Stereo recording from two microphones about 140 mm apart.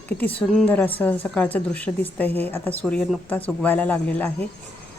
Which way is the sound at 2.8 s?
5° left (ahead or behind).